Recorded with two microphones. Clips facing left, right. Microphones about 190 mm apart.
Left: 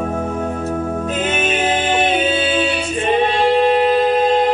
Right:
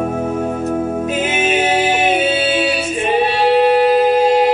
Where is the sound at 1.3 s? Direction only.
10° right (ahead or behind).